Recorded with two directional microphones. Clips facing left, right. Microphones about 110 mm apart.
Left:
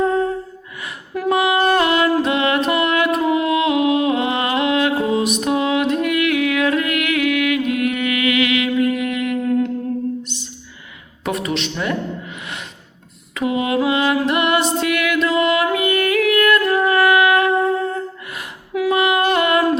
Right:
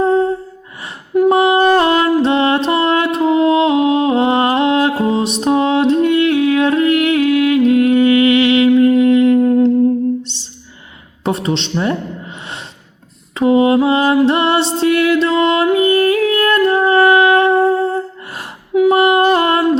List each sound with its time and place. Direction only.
0.0 s gasp: 30° right (ahead or behind)
1.3 s music: 35° right (ahead or behind)
10.2 s a sound: 30° right (ahead or behind)
13.3 s mantra: 35° right (ahead or behind)
18.9 s humming: 35° right (ahead or behind)